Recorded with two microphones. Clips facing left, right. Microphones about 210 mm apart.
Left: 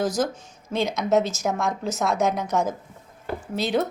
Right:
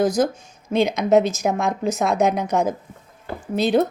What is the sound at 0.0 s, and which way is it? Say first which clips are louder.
A woman's voice: right 5 dB; 15° right (ahead or behind).